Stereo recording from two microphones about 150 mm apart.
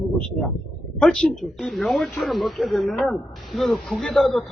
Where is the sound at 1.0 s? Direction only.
5° left (ahead or behind).